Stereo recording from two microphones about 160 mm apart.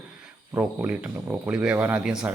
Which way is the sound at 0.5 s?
10° right (ahead or behind).